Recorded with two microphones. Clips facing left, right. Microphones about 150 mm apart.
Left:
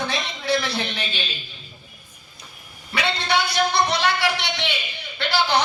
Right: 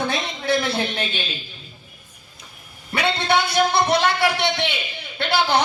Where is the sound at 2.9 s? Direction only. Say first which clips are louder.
Right 3 dB; 50° right (ahead or behind).